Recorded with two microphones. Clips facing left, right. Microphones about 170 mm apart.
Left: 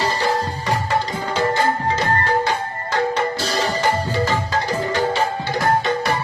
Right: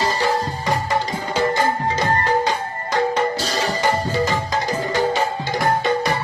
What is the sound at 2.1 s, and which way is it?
Music, 15° right (ahead or behind).